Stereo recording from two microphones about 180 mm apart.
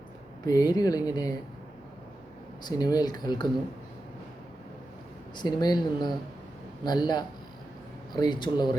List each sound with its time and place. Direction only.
0.4 s speech: 20° left (ahead or behind)
2.6 s speech: 20° left (ahead or behind)
5.4 s speech: 25° left (ahead or behind)